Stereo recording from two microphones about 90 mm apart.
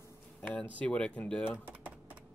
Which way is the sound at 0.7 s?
10° left (ahead or behind).